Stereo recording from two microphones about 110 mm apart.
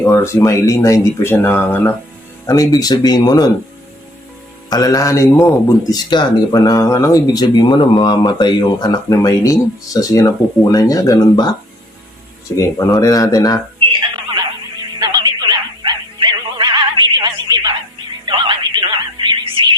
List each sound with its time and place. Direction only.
0.0 s speech: 25° left (ahead or behind)
2.5 s speech: 35° left (ahead or behind)
4.7 s speech: 35° left (ahead or behind)
6.1 s speech: 40° left (ahead or behind)
12.5 s speech: 30° left (ahead or behind)
15.4 s bow-wow: 50° right (ahead or behind)
18.3 s music: 45° right (ahead or behind)